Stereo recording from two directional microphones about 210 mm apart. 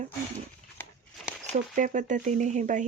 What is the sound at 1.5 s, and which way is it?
Speech, 35° right (ahead or behind).